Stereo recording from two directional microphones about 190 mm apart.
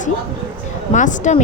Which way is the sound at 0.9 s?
40° left (ahead or behind).